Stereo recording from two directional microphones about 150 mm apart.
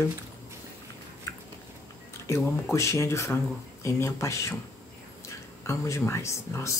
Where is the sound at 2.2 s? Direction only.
20° left (ahead or behind).